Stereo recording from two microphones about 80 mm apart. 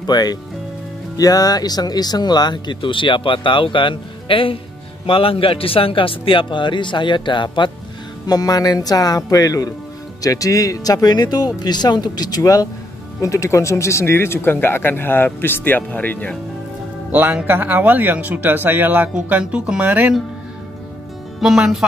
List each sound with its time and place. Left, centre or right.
0.0 s a man's voice: left
8.3 s speech: left
17.1 s a man's voice: right
21.4 s speech: centre